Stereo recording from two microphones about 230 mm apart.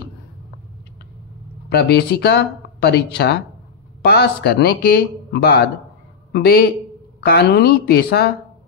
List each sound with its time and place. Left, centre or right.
1.7 s speech: left